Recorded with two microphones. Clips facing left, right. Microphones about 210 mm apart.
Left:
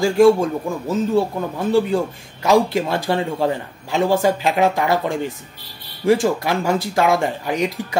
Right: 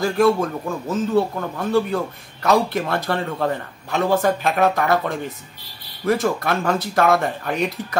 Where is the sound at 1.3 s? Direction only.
15° left (ahead or behind).